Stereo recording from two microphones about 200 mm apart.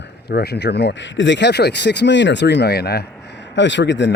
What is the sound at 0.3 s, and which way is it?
Speech, 55° left (ahead or behind).